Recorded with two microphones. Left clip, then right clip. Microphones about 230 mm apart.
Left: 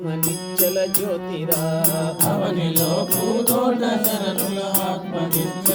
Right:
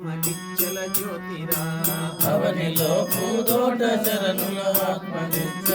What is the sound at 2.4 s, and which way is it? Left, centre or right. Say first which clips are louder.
Music: even; right.